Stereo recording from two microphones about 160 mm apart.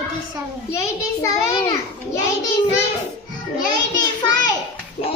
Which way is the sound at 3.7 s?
25° left (ahead or behind).